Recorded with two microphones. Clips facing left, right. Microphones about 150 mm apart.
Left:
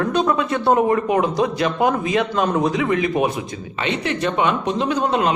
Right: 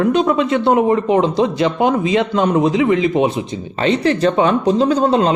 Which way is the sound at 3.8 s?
35° right (ahead or behind).